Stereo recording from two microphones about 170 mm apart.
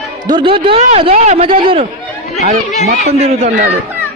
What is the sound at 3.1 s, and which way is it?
Speech, 40° right (ahead or behind).